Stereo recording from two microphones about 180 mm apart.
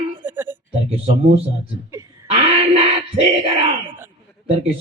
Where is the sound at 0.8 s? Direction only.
30° right (ahead or behind).